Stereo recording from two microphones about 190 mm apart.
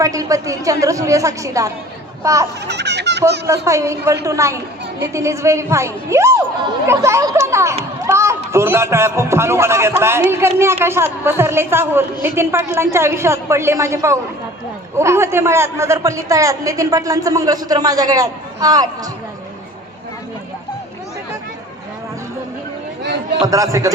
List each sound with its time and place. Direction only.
0.0 s a man's voice: 15° right (ahead or behind)
2.6 s a child's voice: 60° right (ahead or behind)
3.4 s a man's voice: 15° right (ahead or behind)
8.0 s a sound: 15° right (ahead or behind)
8.5 s a man's voice: 15° right (ahead or behind)
23.5 s a man's voice: 15° right (ahead or behind)